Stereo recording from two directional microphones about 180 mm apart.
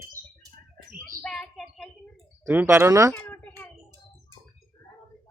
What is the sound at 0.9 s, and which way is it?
Bird, 50° right (ahead or behind).